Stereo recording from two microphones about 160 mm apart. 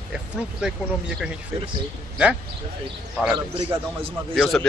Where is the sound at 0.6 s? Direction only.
5° right (ahead or behind).